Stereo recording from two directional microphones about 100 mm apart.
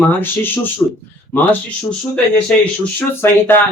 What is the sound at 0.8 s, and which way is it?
Speech, 35° left (ahead or behind).